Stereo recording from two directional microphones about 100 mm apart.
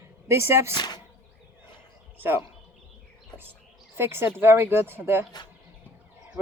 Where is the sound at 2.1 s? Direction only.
20° right (ahead or behind).